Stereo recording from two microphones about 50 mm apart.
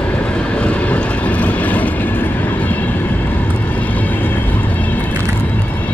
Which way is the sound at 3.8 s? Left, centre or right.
Left.